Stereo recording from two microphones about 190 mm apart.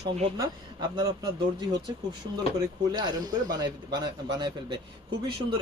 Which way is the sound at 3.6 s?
20° right (ahead or behind).